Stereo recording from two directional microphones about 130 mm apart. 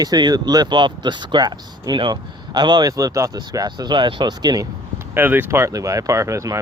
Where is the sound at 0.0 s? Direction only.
30° right (ahead or behind).